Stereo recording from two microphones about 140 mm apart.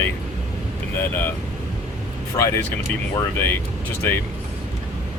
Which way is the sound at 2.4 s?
20° left (ahead or behind).